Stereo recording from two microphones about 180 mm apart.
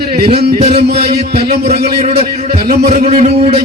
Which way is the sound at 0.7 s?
60° right (ahead or behind).